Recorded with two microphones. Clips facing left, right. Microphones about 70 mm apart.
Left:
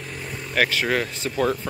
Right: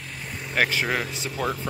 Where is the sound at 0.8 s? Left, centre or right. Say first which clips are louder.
Left 3 dB; centre.